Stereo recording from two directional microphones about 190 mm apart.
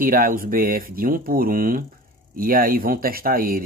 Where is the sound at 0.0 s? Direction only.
50° right (ahead or behind).